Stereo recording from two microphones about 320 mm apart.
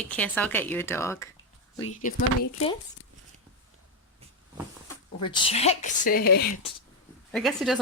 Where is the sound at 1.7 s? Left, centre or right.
Left.